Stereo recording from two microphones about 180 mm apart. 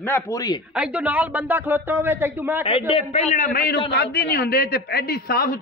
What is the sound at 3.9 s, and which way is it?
A man's voice, 60° left (ahead or behind).